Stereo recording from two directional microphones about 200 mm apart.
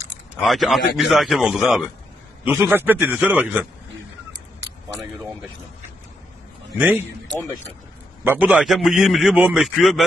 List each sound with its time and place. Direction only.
0.4 s a man's voice: centre (ahead or behind)
6.8 s a man's voice: 10° right (ahead or behind)